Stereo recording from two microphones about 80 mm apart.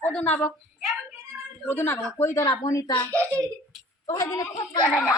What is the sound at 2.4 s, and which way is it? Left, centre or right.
Speech, left.